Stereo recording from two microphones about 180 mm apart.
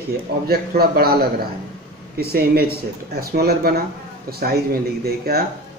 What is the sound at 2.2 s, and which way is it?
Speech, 60° right (ahead or behind).